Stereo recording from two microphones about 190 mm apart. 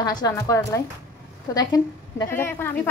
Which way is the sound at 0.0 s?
20° left (ahead or behind).